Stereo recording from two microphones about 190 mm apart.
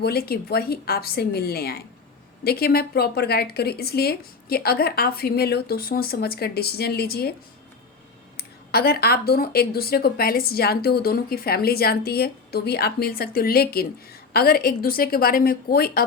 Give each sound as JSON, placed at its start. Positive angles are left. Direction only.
{"t": 0.0, "sound": "a woman's voice", "side_deg": 55}
{"t": 8.4, "sound": "speech", "side_deg": 55}